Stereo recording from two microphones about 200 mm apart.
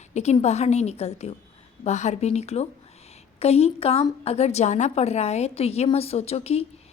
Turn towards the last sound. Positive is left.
turn(degrees=30)  # may be behind; listen again after turning